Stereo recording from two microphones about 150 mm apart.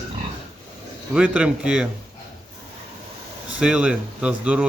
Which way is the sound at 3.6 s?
5° right (ahead or behind).